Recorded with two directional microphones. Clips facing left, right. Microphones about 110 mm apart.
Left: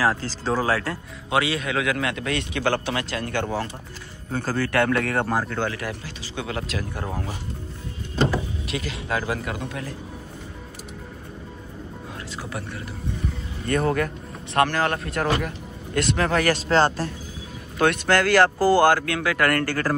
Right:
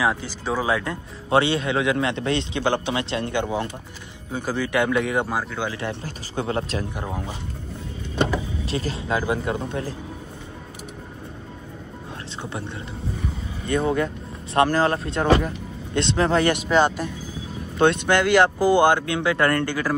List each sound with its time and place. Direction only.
0.0 s speech: 15° right (ahead or behind)
1.3 s a man's voice: 30° right (ahead or behind); by 5.7 s 10° right (ahead or behind)
5.7 s a man's voice: 25° right (ahead or behind)
7.0 s speech: 15° right (ahead or behind)
8.6 s a man's voice: 35° right (ahead or behind)
13.7 s speech: 15° right (ahead or behind)
16.5 s a man's voice: 15° right (ahead or behind)